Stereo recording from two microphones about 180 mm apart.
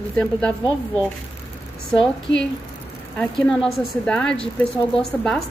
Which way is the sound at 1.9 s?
5° left (ahead or behind).